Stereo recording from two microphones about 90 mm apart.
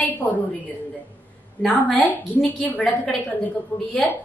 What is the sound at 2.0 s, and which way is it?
Speech, 20° left (ahead or behind).